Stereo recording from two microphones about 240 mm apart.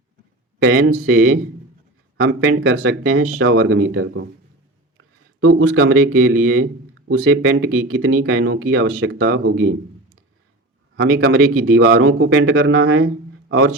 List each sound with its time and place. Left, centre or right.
0.8 s speech: right
11.0 s speech: right